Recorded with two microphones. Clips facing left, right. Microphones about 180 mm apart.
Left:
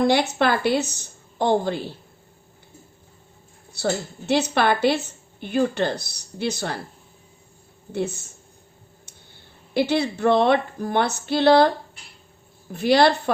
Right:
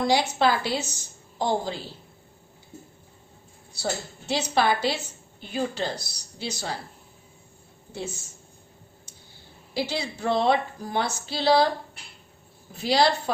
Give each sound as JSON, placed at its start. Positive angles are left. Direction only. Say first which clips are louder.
{"t": 0.0, "sound": "speech", "louder": "left 3 dB", "side_deg": 60}
{"t": 3.7, "sound": "speech", "louder": "left 6 dB", "side_deg": 60}
{"t": 7.9, "sound": "speech", "louder": "left 8 dB", "side_deg": 60}
{"t": 9.7, "sound": "speech", "louder": "left 8 dB", "side_deg": 60}
{"t": 12.7, "sound": "speech", "louder": "left 5 dB", "side_deg": 55}